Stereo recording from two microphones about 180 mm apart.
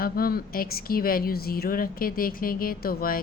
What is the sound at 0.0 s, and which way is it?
A woman's voice, 55° left (ahead or behind).